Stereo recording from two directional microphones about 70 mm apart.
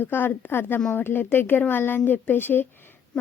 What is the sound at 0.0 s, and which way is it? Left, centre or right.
A woman's voice, left.